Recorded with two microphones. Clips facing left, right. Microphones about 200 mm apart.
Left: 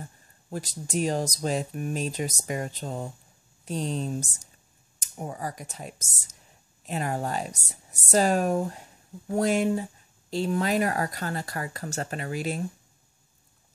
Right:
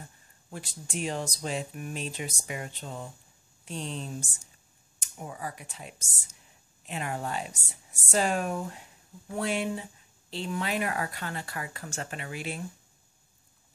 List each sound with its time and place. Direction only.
0.5 s speech: 40° left (ahead or behind)